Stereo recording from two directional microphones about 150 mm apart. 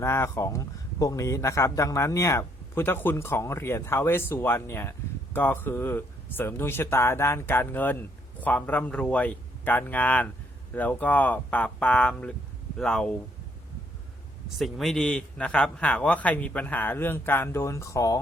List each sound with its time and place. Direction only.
0.0 s speech: 20° left (ahead or behind)
14.6 s speech: centre (ahead or behind); by 18.2 s 20° left (ahead or behind)